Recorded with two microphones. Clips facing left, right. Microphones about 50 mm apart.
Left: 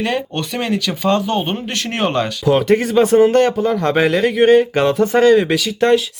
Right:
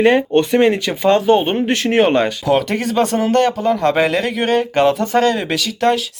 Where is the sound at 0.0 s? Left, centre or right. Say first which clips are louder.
Right 8 dB; right.